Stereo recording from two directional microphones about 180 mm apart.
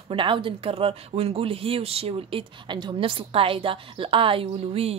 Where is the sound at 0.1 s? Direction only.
30° right (ahead or behind).